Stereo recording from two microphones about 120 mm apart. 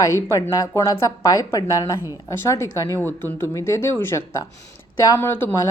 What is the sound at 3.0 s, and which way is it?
Speech, 15° left (ahead or behind).